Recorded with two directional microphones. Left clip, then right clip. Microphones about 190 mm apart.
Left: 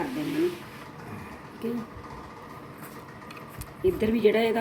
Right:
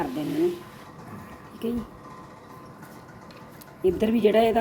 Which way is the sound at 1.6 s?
50° right (ahead or behind).